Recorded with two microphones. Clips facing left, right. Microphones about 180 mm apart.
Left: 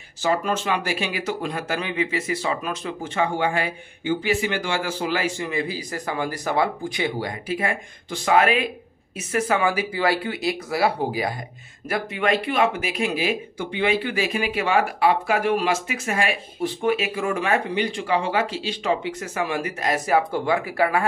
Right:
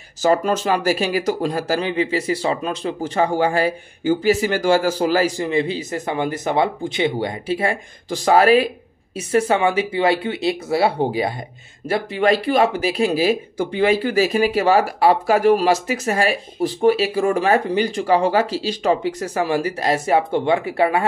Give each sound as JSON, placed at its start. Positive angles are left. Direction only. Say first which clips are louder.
{"t": 0.2, "sound": "speech", "louder": "right 5 dB", "side_deg": -40}